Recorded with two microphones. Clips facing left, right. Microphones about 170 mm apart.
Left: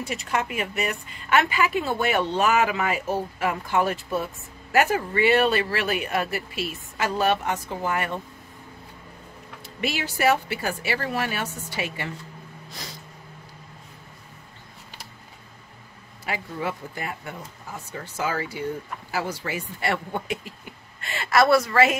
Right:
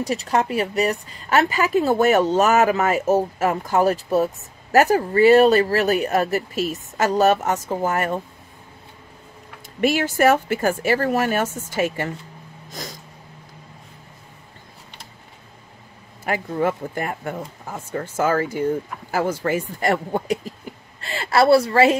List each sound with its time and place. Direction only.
0.0 s a woman's voice: 35° right (ahead or behind)
9.8 s speech: 50° right (ahead or behind)
12.6 s snort: 45° right (ahead or behind)
16.3 s speech: 50° right (ahead or behind); by 21.9 s 30° right (ahead or behind)